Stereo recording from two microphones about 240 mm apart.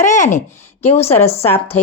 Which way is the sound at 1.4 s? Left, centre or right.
Centre.